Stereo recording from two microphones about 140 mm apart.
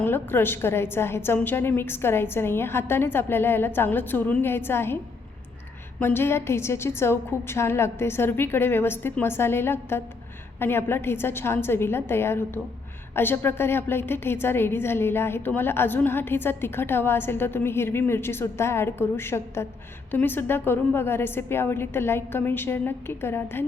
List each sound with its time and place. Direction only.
0.0 s a woman's voice: 15° left (ahead or behind)
6.0 s a woman's voice: 15° left (ahead or behind)